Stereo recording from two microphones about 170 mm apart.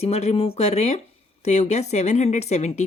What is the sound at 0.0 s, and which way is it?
Speech, 40° left (ahead or behind).